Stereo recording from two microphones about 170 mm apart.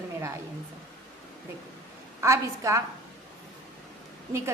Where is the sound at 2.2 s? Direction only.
15° right (ahead or behind).